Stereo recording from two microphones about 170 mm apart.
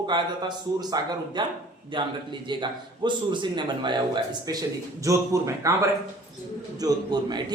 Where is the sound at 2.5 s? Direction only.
25° right (ahead or behind).